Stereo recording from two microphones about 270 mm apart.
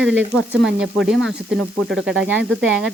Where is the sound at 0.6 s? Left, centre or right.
Centre.